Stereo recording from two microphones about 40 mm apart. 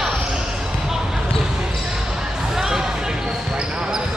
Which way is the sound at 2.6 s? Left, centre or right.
Centre.